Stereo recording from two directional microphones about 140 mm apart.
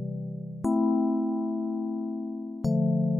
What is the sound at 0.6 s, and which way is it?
Music, centre (ahead or behind).